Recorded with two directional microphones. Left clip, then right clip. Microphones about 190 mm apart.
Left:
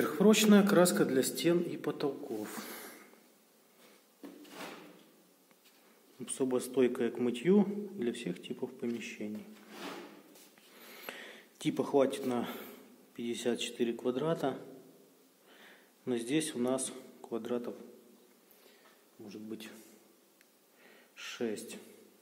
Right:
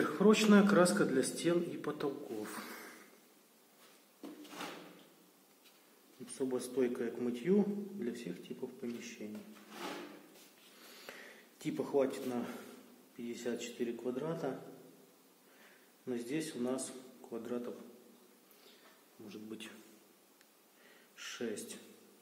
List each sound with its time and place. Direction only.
0.0 s a man's voice: 35° left (ahead or behind)
6.2 s a man's voice: 40° left (ahead or behind)
10.9 s a sound: 40° left (ahead or behind)
13.1 s a man's voice: 45° left (ahead or behind)
16.1 s a man's voice: 40° left (ahead or behind)
19.2 s a man's voice: 30° left (ahead or behind)
21.2 s speech: 35° left (ahead or behind)